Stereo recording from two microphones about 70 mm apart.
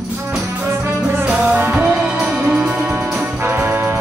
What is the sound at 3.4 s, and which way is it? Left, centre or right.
Brass instrument, right.